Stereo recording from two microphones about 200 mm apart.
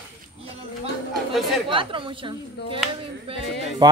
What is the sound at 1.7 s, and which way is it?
Speech, 25° right (ahead or behind).